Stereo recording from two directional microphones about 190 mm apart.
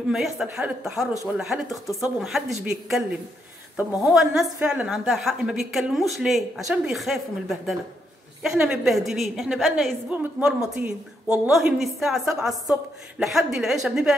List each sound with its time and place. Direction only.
0.1 s a woman's voice: 5° right (ahead or behind)